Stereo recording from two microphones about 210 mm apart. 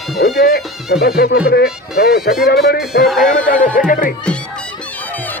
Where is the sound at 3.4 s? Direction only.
40° left (ahead or behind).